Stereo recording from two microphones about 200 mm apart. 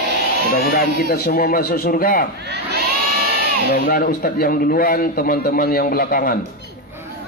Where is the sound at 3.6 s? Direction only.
45° left (ahead or behind).